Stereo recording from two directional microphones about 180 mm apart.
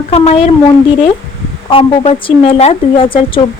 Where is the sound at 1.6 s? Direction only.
30° left (ahead or behind).